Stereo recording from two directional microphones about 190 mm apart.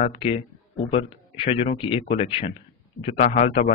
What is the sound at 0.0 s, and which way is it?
Speech, 30° left (ahead or behind).